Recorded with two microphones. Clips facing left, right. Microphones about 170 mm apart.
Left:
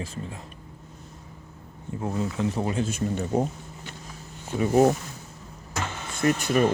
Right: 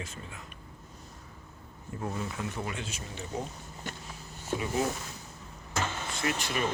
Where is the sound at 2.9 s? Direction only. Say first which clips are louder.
Left 13 dB; 50° left (ahead or behind).